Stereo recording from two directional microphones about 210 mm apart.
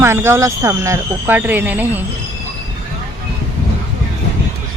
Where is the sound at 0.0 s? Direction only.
10° right (ahead or behind).